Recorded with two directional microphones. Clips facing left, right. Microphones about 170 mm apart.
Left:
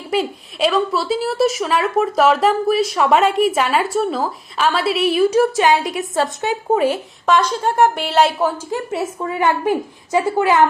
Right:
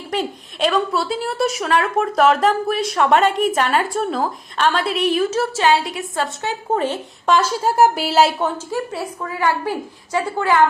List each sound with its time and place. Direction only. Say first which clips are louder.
0.1 s a woman's voice: left 4 dB; 5° left (ahead or behind)
7.3 s a woman's voice: even; 5° right (ahead or behind)
8.7 s a woman's voice: left 2 dB; 20° left (ahead or behind)